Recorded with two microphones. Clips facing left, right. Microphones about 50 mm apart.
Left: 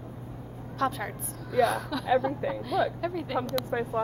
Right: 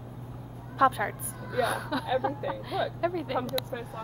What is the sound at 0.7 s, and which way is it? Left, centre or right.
Speech, centre.